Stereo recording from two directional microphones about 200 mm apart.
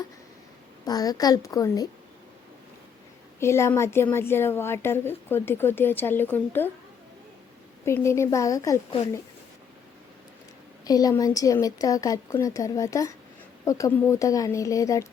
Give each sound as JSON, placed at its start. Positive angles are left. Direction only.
{"t": 0.9, "sound": "a woman's voice", "side_deg": 20}
{"t": 3.4, "sound": "a woman's voice", "side_deg": 15}
{"t": 7.9, "sound": "a woman's voice", "side_deg": 15}
{"t": 10.8, "sound": "a woman's voice", "side_deg": 20}